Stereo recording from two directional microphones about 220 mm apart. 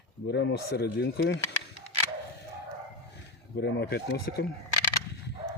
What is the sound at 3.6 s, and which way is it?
Speech, 50° left (ahead or behind).